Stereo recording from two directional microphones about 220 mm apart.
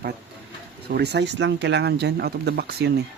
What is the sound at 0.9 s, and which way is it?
Speech, 50° right (ahead or behind).